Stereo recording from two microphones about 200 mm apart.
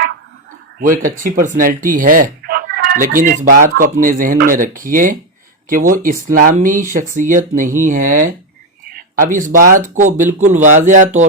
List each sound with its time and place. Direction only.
0.8 s speech: 40° right (ahead or behind)